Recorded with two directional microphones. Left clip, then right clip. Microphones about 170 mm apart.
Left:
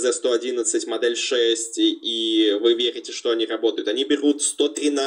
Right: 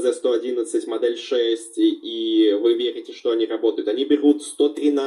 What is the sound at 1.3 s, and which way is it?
Speech, 20° left (ahead or behind).